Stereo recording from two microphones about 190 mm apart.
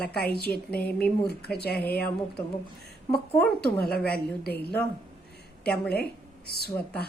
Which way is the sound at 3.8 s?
55° left (ahead or behind).